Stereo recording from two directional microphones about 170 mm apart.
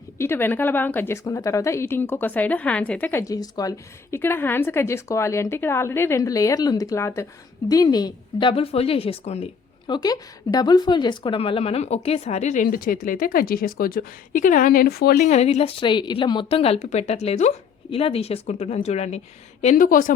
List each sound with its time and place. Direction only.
0.2 s a woman's voice: 15° left (ahead or behind); by 12.6 s 45° left (ahead or behind)
12.6 s speech: 60° left (ahead or behind)
15.3 s a woman's voice: 40° left (ahead or behind)
19.6 s speech: 55° left (ahead or behind)